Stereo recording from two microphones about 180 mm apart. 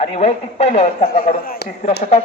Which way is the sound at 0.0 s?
35° left (ahead or behind).